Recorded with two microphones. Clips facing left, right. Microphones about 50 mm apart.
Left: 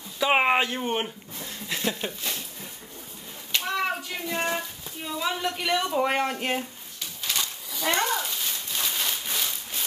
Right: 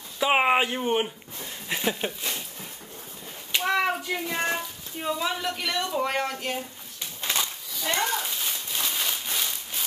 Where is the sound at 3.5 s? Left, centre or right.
Centre.